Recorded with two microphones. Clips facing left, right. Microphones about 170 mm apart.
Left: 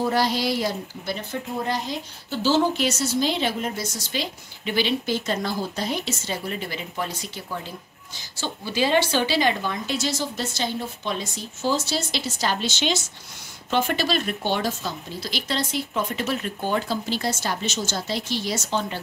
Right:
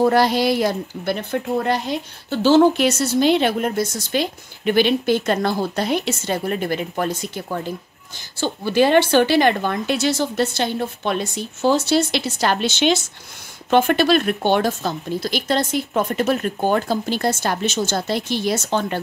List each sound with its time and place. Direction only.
0.0 s a woman's voice: 60° right (ahead or behind)